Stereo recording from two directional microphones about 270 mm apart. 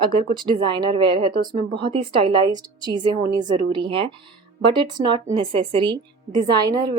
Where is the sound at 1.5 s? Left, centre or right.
Centre.